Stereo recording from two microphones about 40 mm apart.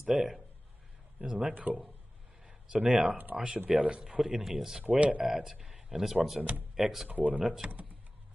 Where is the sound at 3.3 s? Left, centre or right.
Centre.